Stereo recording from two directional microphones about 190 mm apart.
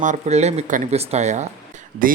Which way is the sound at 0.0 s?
40° right (ahead or behind).